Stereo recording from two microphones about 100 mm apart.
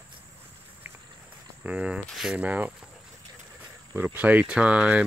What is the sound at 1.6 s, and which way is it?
Speech, 10° right (ahead or behind).